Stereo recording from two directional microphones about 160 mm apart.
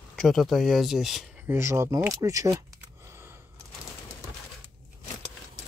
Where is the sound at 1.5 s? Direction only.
15° right (ahead or behind).